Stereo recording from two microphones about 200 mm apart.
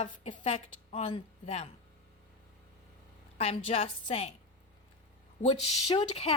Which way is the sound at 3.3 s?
30° left (ahead or behind).